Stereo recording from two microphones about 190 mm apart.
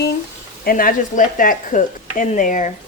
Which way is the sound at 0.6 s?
50° left (ahead or behind).